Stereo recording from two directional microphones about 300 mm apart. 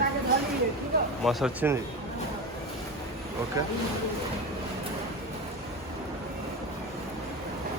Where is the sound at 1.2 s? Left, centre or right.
Centre.